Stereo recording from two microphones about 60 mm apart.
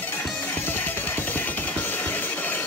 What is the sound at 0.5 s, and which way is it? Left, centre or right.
Music, left.